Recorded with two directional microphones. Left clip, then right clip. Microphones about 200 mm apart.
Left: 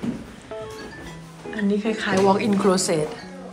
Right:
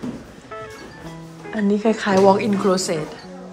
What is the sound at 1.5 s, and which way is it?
A woman's voice, 35° right (ahead or behind).